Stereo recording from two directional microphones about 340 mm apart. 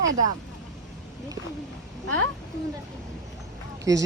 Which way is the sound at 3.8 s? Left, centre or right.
Centre.